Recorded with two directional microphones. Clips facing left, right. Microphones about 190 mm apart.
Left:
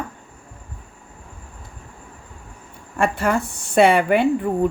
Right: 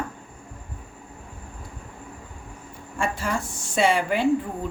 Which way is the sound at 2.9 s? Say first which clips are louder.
Left 7 dB; 60° left (ahead or behind).